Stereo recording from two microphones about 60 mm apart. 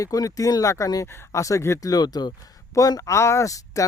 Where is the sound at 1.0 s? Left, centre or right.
Left.